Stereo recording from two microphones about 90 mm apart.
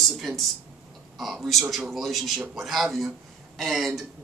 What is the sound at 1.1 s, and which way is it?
A man's voice, centre (ahead or behind).